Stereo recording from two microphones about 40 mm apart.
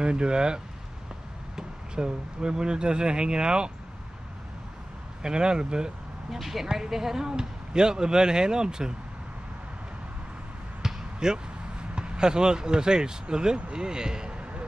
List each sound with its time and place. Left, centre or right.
0.0 s speech: right
2.0 s speech: centre
5.2 s speech: right
6.3 s speech: centre
10.8 s basketball bounce: centre
11.9 s speech: right